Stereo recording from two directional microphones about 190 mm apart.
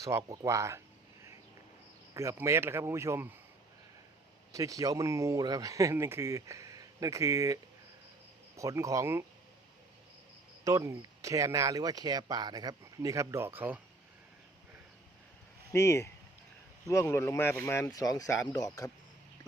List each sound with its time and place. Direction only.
0.3 s speech: 15° right (ahead or behind)
2.1 s speech: 15° right (ahead or behind)
4.5 s speech: 20° right (ahead or behind)
10.6 s speech: 20° right (ahead or behind)
15.7 s speech: 15° left (ahead or behind)